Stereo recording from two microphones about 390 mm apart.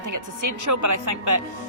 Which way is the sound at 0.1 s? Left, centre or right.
Right.